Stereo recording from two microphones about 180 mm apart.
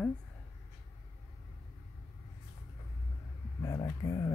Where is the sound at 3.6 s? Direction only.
20° left (ahead or behind).